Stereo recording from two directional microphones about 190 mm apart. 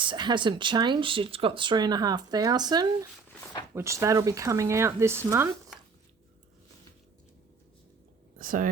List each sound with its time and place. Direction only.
0.0 s speech: 25° right (ahead or behind)
8.4 s speech: 45° right (ahead or behind)